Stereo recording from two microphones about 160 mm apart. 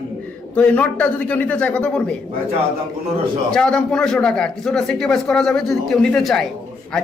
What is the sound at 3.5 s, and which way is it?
A man's voice, 5° left (ahead or behind).